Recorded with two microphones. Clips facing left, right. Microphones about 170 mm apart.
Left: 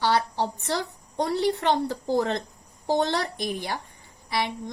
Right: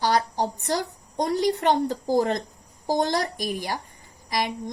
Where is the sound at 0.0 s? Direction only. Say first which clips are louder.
Right 1 dB; 40° right (ahead or behind).